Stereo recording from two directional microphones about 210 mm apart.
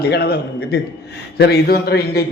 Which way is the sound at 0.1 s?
50° left (ahead or behind).